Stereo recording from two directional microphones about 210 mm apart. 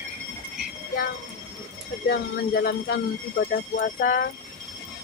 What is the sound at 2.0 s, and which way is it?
Speech, 50° left (ahead or behind).